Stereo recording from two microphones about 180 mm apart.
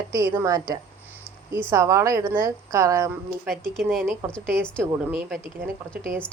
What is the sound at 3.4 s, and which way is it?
Speech, centre (ahead or behind).